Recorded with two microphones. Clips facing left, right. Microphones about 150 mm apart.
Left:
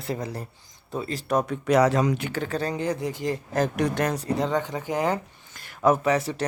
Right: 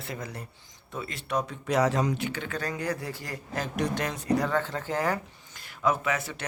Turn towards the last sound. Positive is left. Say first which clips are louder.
# left 7 dB
turn(degrees=35)  # may be behind; listen again after turning